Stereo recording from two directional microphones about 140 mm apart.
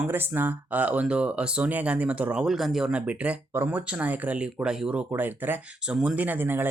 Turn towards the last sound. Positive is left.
turn(degrees=-15)  # may be behind; listen again after turning